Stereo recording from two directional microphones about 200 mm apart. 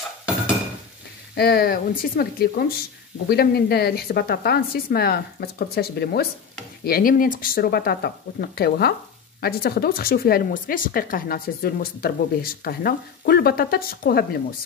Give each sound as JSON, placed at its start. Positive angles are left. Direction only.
{"t": 1.3, "sound": "speech", "side_deg": 50}